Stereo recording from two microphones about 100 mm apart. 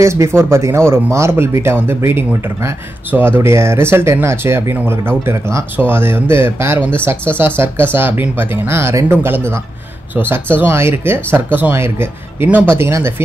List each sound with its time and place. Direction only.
0.0 s speech: 30° right (ahead or behind)